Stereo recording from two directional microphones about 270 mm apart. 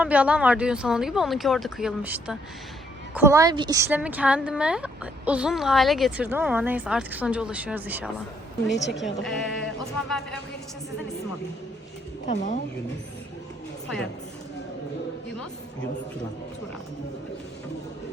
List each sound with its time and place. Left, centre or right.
0.0 s speech: centre
8.7 s a woman's voice: left
9.2 s speech: centre
12.2 s speech: left